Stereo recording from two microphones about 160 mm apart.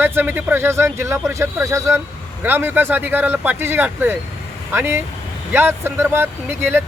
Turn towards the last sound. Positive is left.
turn(degrees=-15)  # may be behind; listen again after turning